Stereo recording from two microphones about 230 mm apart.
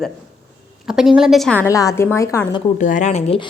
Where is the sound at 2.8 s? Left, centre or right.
Left.